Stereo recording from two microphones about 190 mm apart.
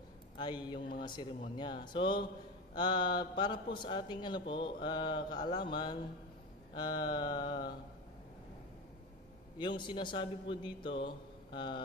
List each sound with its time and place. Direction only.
0.4 s speech: 25° left (ahead or behind)
9.6 s speech: 25° left (ahead or behind)
11.0 s mantra: 25° left (ahead or behind)